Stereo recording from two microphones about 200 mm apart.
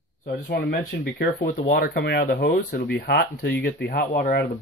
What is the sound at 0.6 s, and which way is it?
Speech, 55° left (ahead or behind).